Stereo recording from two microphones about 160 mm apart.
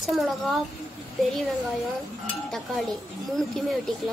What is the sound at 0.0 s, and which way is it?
Speech, centre (ahead or behind).